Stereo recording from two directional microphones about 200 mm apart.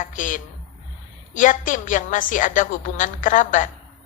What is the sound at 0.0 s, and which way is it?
A woman's voice, 40° left (ahead or behind).